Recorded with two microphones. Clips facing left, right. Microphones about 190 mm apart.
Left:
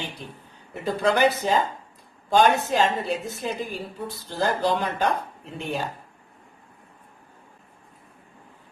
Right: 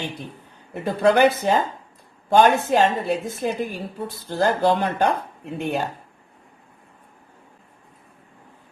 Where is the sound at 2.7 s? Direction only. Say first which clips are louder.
Right 4 dB; 55° right (ahead or behind).